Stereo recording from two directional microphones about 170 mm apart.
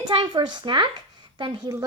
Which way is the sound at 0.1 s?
25° right (ahead or behind).